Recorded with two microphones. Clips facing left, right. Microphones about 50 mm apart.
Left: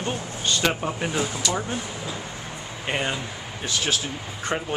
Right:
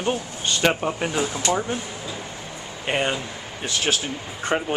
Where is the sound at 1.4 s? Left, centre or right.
Right.